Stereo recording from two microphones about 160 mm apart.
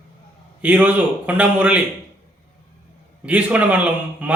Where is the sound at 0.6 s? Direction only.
10° right (ahead or behind).